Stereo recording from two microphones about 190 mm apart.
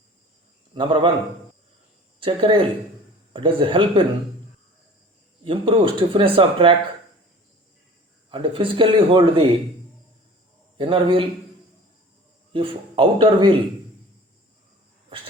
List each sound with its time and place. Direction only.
0.7 s a man's voice: 25° right (ahead or behind)
2.2 s speech: 30° right (ahead or behind)
5.5 s speech: 25° right (ahead or behind)
8.3 s speech: 25° right (ahead or behind)
10.8 s speech: 25° right (ahead or behind)
12.5 s speech: 30° right (ahead or behind)